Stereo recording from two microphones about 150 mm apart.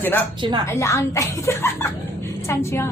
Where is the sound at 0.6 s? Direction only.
20° left (ahead or behind).